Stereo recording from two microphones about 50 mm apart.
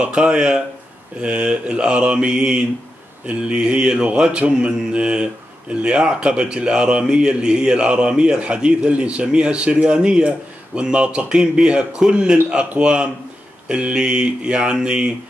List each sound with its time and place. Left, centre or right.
0.0 s a man's voice: centre